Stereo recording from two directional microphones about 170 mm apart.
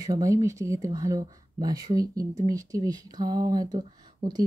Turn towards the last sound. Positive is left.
turn(degrees=-25)  # may be behind; listen again after turning